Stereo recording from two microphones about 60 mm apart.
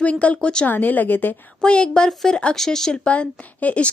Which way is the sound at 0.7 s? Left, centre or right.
Left.